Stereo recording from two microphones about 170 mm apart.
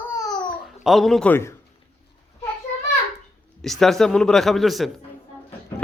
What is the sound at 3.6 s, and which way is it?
A man's voice, centre (ahead or behind).